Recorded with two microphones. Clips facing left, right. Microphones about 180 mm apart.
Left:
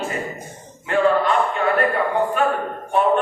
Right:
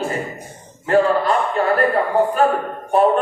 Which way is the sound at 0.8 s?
35° right (ahead or behind).